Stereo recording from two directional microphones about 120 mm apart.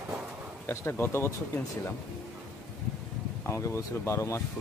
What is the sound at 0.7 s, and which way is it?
Speech, 20° left (ahead or behind).